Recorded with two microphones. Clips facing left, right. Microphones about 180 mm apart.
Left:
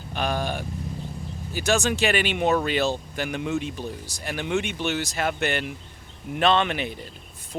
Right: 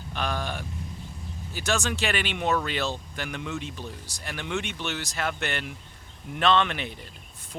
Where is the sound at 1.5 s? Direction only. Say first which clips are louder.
Left 5 dB; 10° left (ahead or behind).